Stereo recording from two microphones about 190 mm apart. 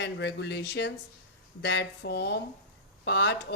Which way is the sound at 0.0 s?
65° left (ahead or behind).